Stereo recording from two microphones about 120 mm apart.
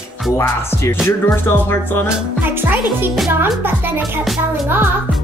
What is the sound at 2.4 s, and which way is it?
A child's voice, 15° right (ahead or behind).